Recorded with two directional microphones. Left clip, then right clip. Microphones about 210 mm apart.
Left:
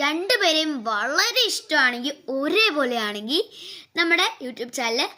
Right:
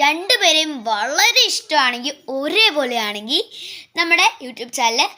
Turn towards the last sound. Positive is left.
turn(degrees=10)  # may be behind; listen again after turning